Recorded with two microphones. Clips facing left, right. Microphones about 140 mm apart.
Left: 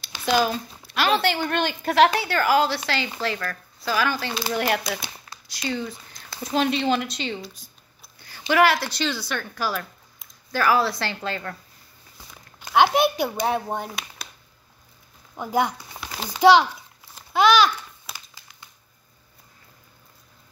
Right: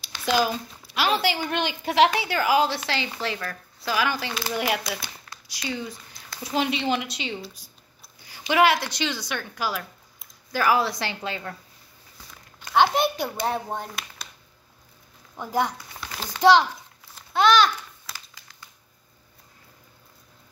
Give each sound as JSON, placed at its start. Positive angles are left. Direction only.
{"t": 0.1, "sound": "a sound", "side_deg": 10}
{"t": 0.9, "sound": "a woman's voice", "side_deg": -10}
{"t": 12.7, "sound": "speech", "side_deg": 5}
{"t": 15.3, "sound": "speech", "side_deg": 10}
{"t": 15.9, "sound": "a sound", "side_deg": 15}
{"t": 17.1, "sound": "babbling", "side_deg": 5}
{"t": 18.0, "sound": "crumpling", "side_deg": 20}